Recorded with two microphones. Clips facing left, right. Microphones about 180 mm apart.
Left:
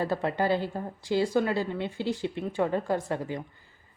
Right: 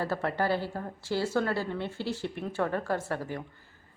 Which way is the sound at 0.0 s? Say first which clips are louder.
Left 2 dB; 15° left (ahead or behind).